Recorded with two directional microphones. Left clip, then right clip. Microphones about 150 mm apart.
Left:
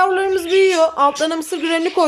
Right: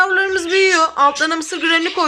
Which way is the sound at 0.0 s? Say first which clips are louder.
Right 1 dB; 10° left (ahead or behind).